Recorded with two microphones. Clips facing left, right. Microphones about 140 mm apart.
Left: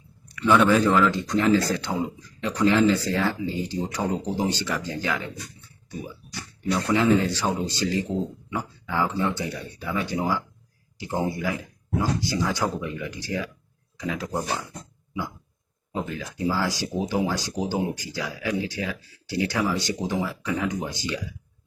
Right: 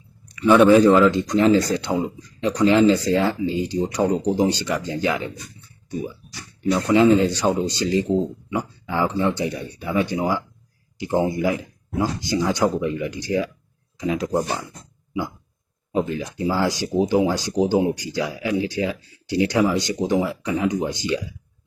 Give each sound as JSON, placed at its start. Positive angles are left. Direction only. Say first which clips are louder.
{"t": 0.3, "sound": "speech", "louder": "right 6 dB", "side_deg": -20}
{"t": 6.8, "sound": "speech", "louder": "right 5 dB", "side_deg": -20}
{"t": 15.9, "sound": "speech", "louder": "right 7 dB", "side_deg": -20}